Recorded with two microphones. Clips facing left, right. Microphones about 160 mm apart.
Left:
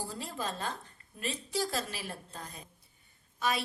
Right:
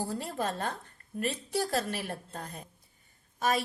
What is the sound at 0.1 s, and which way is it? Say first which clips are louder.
A woman's voice: right 5 dB; 55° right (ahead or behind).